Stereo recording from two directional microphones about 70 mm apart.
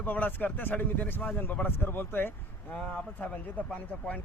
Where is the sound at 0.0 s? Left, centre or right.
Left.